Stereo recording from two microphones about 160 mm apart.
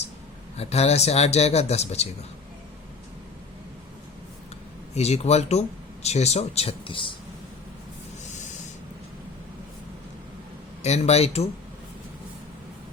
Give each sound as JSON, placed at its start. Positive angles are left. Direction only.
{"t": 0.5, "sound": "speech", "side_deg": 40}
{"t": 4.9, "sound": "speech", "side_deg": 40}
{"t": 10.8, "sound": "speech", "side_deg": 45}